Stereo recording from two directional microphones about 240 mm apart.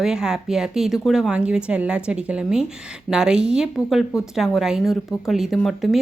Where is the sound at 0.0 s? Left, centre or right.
Centre.